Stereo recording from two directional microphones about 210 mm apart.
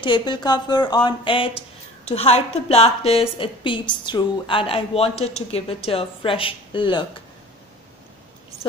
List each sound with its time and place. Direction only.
0.0 s a woman's voice: 20° left (ahead or behind)